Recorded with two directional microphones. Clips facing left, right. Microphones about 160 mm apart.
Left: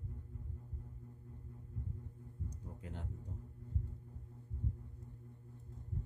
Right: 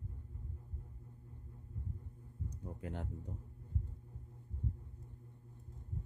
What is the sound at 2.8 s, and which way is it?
Speech, 60° right (ahead or behind).